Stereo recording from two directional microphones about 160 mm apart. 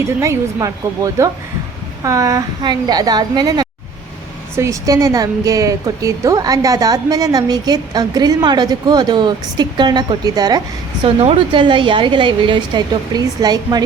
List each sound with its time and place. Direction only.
0.2 s a woman's voice: 20° right (ahead or behind)